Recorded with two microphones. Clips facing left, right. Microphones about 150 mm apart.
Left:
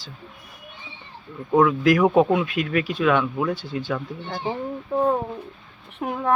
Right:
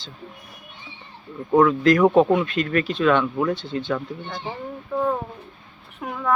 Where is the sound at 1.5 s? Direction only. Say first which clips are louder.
Right 1 dB; 5° left (ahead or behind).